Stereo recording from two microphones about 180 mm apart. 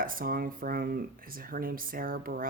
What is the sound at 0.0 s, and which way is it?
Speech, 50° right (ahead or behind).